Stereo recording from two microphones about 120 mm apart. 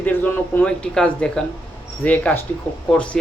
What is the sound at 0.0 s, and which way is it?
Speech, 15° left (ahead or behind).